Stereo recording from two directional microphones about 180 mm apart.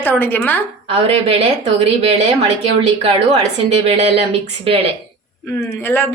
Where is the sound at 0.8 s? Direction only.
30° right (ahead or behind).